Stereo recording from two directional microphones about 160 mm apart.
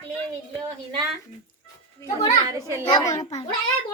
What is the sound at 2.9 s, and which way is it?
Speech, 25° left (ahead or behind).